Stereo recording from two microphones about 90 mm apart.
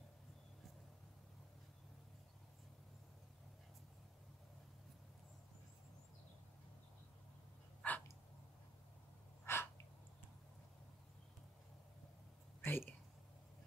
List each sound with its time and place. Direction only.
7.8 s a sound: 15° left (ahead or behind)
9.4 s gasp: 25° left (ahead or behind)
12.6 s speech: 25° left (ahead or behind)